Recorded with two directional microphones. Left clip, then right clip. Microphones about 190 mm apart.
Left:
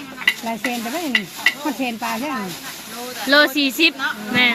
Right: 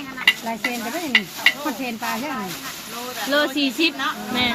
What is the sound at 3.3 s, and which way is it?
Speech, 25° left (ahead or behind).